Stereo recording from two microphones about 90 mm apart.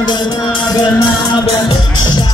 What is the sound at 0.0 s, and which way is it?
Music, 55° left (ahead or behind).